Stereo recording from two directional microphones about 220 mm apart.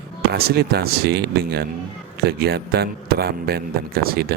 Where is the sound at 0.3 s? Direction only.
45° right (ahead or behind).